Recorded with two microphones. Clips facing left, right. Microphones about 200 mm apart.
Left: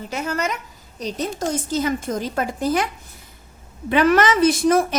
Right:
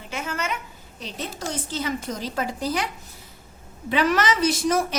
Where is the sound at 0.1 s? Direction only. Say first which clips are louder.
Left 4 dB; 40° left (ahead or behind).